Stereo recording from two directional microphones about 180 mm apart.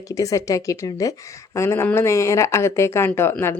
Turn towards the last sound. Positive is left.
turn(degrees=10)  # may be behind; listen again after turning